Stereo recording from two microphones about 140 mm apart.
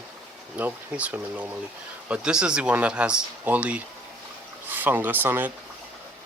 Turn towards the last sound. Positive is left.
turn(degrees=-15)  # may be behind; listen again after turning